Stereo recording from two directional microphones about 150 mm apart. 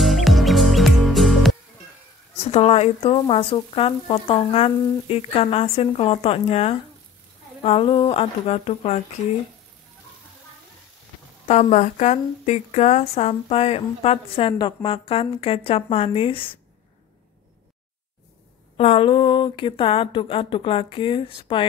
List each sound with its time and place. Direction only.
0.0 s music: centre (ahead or behind)
2.3 s speech: 45° left (ahead or behind)
11.4 s speech: 50° left (ahead or behind)
18.8 s speech: 40° left (ahead or behind)